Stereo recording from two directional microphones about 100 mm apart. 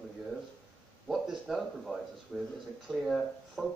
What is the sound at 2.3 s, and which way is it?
Speech, 15° right (ahead or behind).